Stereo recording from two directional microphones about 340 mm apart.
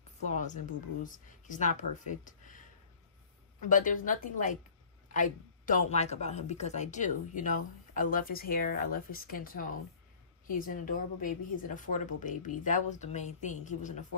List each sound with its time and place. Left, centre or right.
0.2 s a woman's voice: left
3.6 s a woman's voice: left